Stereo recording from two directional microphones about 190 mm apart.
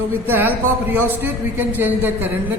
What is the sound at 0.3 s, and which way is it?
Speech, 10° right (ahead or behind).